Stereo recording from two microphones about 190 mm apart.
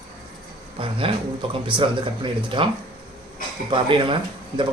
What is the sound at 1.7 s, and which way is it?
Speech, 25° right (ahead or behind).